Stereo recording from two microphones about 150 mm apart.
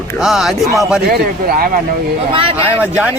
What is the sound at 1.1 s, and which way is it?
Speech, 90° right.